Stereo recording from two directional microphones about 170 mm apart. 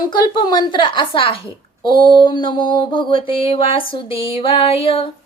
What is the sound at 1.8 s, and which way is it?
Mantra, 30° left (ahead or behind).